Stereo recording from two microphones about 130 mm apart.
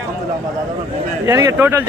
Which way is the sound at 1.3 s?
20° right (ahead or behind).